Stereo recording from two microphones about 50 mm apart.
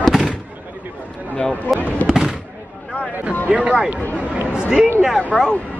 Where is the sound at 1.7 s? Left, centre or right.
Left.